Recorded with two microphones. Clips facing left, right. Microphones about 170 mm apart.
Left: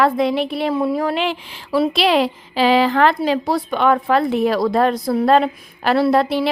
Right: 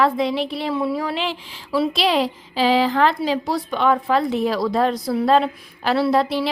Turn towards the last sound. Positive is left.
turn(degrees=55)  # may be behind; listen again after turning